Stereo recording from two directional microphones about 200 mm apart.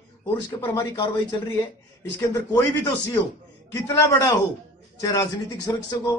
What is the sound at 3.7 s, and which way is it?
Speech, 15° left (ahead or behind).